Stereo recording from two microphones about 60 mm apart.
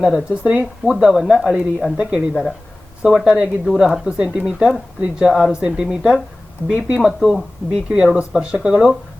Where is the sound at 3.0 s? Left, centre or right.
Centre.